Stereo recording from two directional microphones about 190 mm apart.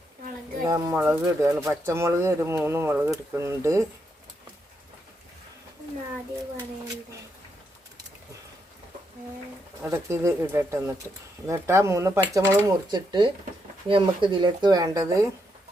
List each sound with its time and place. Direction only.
0.6 s speech: 20° right (ahead or behind)
9.8 s speech: 15° right (ahead or behind)